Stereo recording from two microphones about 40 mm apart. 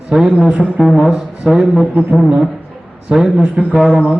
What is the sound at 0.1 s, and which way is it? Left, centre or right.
Speech, centre.